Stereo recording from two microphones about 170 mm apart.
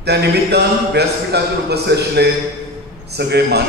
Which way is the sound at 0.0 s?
75° right (ahead or behind).